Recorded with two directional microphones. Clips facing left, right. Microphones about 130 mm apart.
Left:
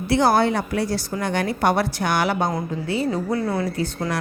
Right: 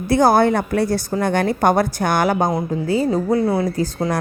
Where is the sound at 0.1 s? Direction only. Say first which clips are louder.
Right 4 dB; 50° right (ahead or behind).